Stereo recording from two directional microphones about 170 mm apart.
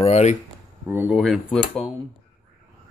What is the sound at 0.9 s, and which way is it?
Speech, 15° right (ahead or behind).